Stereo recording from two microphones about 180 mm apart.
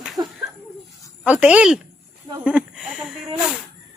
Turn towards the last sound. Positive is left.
turn(degrees=-5)  # may be behind; listen again after turning